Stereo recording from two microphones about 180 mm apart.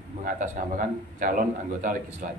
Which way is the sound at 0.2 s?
50° right (ahead or behind).